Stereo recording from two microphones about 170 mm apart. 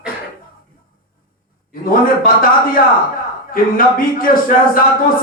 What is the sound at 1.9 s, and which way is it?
Speech, 55° left (ahead or behind).